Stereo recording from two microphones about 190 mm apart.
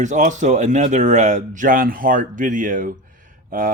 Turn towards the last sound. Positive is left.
turn(degrees=-45)  # may be behind; listen again after turning